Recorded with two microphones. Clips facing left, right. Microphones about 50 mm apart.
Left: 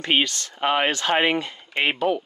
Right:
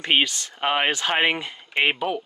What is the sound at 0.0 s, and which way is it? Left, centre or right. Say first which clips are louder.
Speech: even; centre.